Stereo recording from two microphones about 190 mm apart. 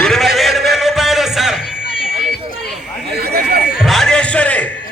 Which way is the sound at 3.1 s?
55° right (ahead or behind).